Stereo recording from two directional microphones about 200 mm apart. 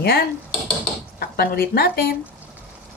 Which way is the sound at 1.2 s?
50° left (ahead or behind).